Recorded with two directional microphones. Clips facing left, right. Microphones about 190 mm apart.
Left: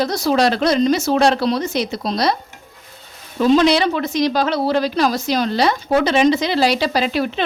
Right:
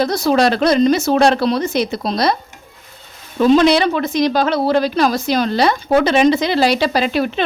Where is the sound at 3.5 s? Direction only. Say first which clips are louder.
Right 2 dB; 55° right (ahead or behind).